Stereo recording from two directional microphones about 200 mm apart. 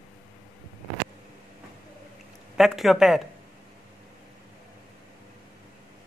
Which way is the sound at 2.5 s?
Centre (ahead or behind).